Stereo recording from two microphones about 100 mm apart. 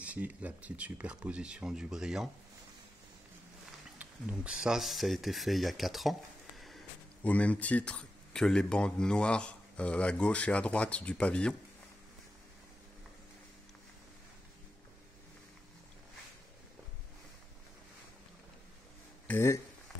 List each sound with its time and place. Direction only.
0.0 s speech: 15° right (ahead or behind)
4.0 s speech: 15° right (ahead or behind)
7.2 s speech: 15° left (ahead or behind)
19.2 s speech: 25° left (ahead or behind)